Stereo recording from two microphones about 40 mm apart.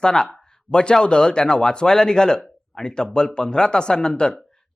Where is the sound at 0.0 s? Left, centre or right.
Centre.